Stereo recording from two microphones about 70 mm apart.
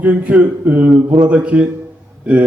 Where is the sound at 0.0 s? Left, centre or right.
Right.